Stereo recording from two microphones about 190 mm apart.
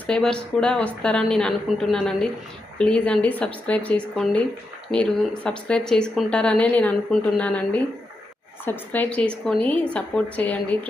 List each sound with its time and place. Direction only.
0.1 s speech: 5° left (ahead or behind)